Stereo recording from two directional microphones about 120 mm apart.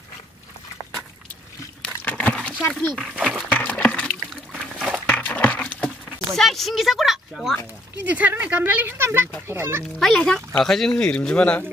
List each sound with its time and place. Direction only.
2.0 s a sound: 10° left (ahead or behind)
3.0 s speech: 5° right (ahead or behind)
3.5 s a sound: 15° left (ahead or behind); by 5.0 s 5° right (ahead or behind)
5.0 s horse: 15° left (ahead or behind)
6.3 s speech: centre (ahead or behind)
8.0 s speech: 15° right (ahead or behind)
9.9 s speech: 5° left (ahead or behind)